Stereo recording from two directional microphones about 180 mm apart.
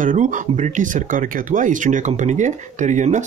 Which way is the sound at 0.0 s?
45° right (ahead or behind).